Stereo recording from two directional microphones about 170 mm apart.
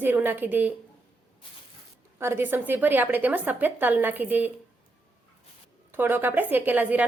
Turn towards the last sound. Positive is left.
turn(degrees=-10)  # may be behind; listen again after turning